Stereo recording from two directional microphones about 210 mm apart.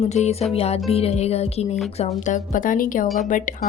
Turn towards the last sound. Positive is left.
turn(degrees=35)  # may be behind; listen again after turning